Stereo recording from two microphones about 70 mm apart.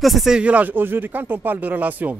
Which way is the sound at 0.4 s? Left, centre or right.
Right.